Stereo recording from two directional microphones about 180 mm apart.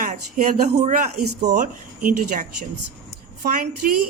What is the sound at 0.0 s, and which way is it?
A woman's voice, 45° right (ahead or behind).